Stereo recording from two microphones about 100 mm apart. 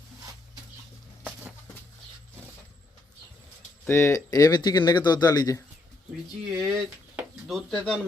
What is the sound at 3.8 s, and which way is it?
Speech, 25° left (ahead or behind).